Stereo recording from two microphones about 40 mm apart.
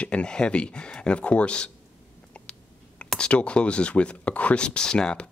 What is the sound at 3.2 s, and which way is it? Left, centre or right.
Speech, left.